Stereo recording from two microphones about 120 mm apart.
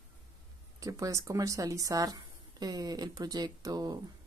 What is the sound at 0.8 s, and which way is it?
Speech, 30° right (ahead or behind).